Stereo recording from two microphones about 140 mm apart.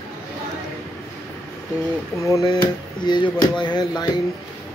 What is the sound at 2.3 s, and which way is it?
Speech, 25° left (ahead or behind).